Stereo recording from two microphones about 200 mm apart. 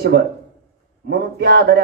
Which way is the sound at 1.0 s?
55° right (ahead or behind).